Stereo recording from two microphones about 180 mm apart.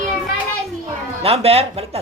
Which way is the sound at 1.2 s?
35° right (ahead or behind).